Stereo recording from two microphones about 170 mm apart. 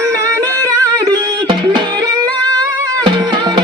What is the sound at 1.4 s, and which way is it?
Music, 30° right (ahead or behind).